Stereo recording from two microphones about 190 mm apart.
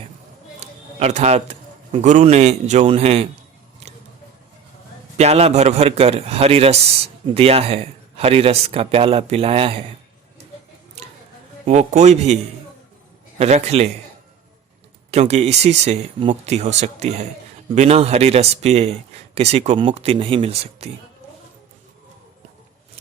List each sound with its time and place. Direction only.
0.6 s speech: 35° right (ahead or behind)
5.1 s speech: 35° right (ahead or behind)
11.6 s speech: 35° right (ahead or behind)
13.4 s speech: 35° right (ahead or behind)
15.1 s speech: 35° right (ahead or behind)